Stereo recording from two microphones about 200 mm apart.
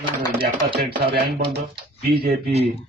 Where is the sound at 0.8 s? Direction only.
50° right (ahead or behind).